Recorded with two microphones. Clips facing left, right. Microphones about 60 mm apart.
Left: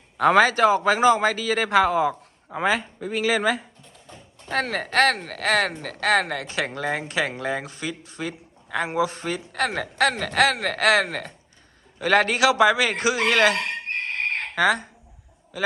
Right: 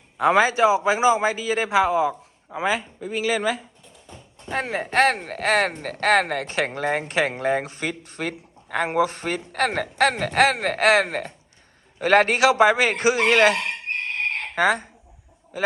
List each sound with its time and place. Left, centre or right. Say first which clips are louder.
0.2 s a man's voice: left 1 dB; centre
4.4 s speech: left 1 dB; centre; by 14.8 s right